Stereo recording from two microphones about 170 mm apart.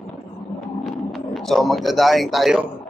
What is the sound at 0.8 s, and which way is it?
A man's voice, centre (ahead or behind).